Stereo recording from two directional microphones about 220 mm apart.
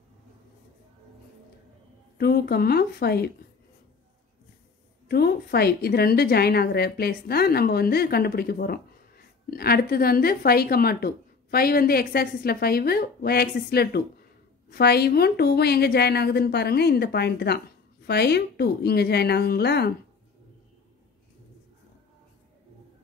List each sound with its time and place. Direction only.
2.1 s a woman's voice: 45° left (ahead or behind)
5.0 s a woman's voice: 45° left (ahead or behind)